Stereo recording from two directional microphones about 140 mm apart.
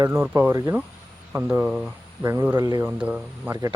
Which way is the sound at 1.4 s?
10° right (ahead or behind).